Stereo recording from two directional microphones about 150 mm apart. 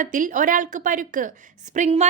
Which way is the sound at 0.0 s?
60° right (ahead or behind).